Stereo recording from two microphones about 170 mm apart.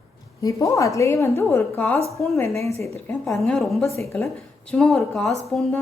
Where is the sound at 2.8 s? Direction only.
15° left (ahead or behind).